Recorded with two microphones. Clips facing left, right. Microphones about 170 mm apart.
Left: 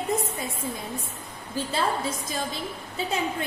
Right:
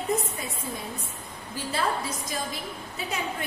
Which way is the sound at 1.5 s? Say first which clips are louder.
Left 2 dB; 25° left (ahead or behind).